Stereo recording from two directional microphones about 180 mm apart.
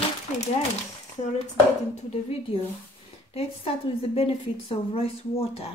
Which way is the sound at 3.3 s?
35° left (ahead or behind).